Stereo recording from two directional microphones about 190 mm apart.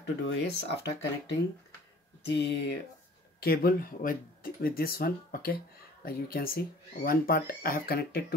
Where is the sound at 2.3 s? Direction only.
65° left (ahead or behind).